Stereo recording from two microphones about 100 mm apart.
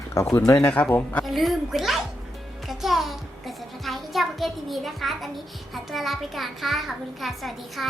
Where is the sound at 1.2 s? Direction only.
Centre (ahead or behind).